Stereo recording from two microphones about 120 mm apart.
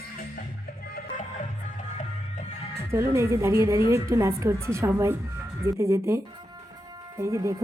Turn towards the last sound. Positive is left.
turn(degrees=-25)  # may be behind; listen again after turning